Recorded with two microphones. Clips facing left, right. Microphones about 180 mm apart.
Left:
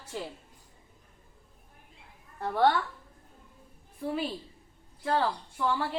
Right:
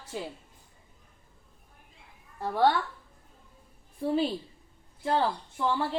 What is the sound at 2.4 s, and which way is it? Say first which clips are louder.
Speech: even; 10° right (ahead or behind).